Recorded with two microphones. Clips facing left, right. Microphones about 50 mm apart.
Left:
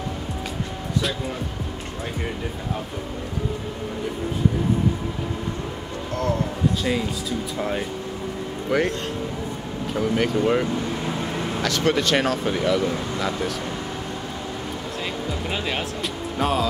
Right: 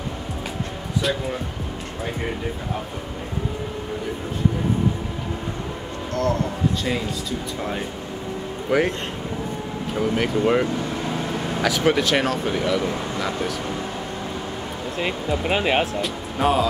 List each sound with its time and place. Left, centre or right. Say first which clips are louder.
6.8 s speech: left 1 dB; centre
9.9 s speech: even; centre
15.5 s speech: right 8 dB; right
16.0 s speech: right 2 dB; centre